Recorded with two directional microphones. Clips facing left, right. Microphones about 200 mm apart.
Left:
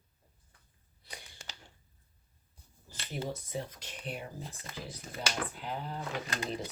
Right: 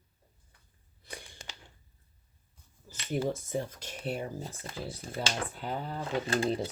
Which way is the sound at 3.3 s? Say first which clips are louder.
Right 5 dB; 45° right (ahead or behind).